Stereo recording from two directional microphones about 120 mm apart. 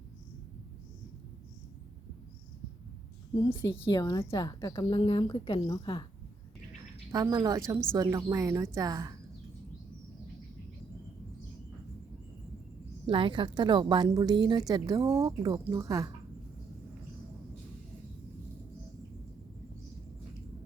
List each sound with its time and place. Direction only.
3.5 s a woman's voice: 30° left (ahead or behind)
7.1 s a woman's voice: 30° right (ahead or behind)
13.1 s a woman's voice: 45° right (ahead or behind); by 16.1 s 25° right (ahead or behind)